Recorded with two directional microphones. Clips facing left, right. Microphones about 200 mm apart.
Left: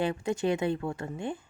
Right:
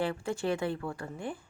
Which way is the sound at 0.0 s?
20° left (ahead or behind).